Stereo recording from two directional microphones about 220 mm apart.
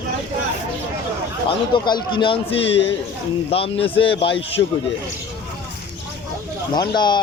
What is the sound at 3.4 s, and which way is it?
Speech, 25° left (ahead or behind).